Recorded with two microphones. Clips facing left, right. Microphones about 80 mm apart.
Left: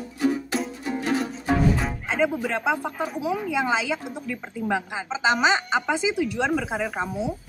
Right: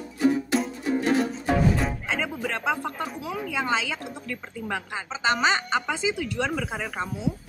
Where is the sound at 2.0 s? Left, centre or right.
Centre.